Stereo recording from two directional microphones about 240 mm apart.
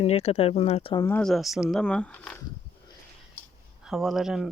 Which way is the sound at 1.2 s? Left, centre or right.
Centre.